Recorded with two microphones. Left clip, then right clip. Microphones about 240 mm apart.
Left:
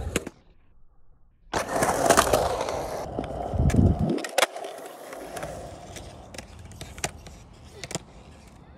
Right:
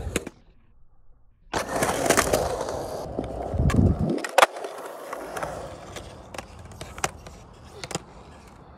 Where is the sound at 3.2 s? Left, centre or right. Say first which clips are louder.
Even; left.